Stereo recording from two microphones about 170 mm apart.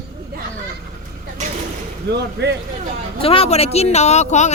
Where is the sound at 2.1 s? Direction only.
85° right.